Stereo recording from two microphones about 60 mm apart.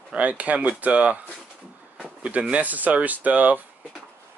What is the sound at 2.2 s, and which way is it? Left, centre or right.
Speech, right.